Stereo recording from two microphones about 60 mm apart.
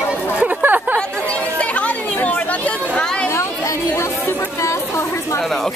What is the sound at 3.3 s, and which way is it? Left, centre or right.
Chatter, left.